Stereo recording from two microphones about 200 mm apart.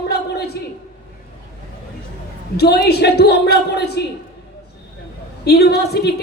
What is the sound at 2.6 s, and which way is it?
A woman's voice, 55° left (ahead or behind).